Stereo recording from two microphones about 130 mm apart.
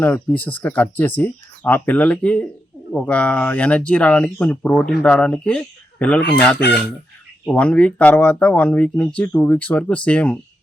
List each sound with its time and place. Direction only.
0.0 s speech: 10° left (ahead or behind)